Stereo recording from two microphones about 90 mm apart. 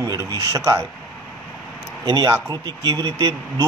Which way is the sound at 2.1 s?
40° right (ahead or behind).